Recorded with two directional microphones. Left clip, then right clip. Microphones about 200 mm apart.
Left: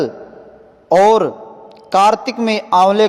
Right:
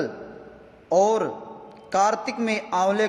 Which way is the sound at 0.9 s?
35° left (ahead or behind).